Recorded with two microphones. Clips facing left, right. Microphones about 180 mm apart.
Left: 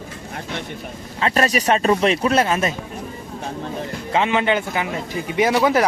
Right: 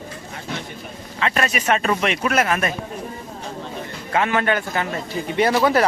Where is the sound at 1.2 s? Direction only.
35° left (ahead or behind).